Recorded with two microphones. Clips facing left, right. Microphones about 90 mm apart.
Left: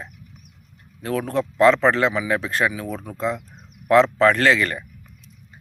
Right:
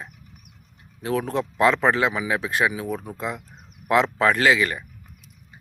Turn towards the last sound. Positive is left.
turn(degrees=-10)  # may be behind; listen again after turning